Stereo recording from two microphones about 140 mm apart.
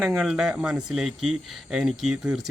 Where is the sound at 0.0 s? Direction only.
Centre (ahead or behind).